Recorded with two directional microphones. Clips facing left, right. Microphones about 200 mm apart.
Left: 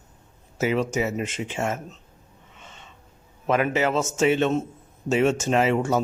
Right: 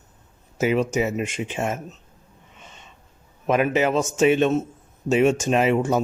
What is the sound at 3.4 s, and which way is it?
Speech, 15° right (ahead or behind).